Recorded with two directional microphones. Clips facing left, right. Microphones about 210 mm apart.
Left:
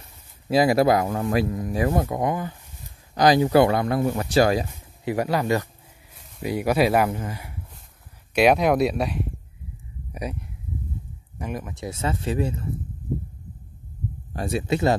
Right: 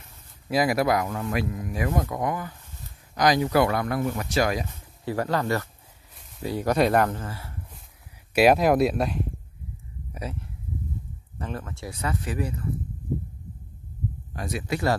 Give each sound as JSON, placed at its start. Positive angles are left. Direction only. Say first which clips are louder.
{"t": 0.5, "sound": "speech", "louder": "left 4 dB", "side_deg": 30}
{"t": 5.0, "sound": "speech", "louder": "left 2 dB", "side_deg": 15}
{"t": 8.4, "sound": "speech", "louder": "even", "side_deg": 0}
{"t": 10.1, "sound": "speech", "louder": "left 3 dB", "side_deg": 15}
{"t": 14.3, "sound": "speech", "louder": "left 6 dB", "side_deg": 30}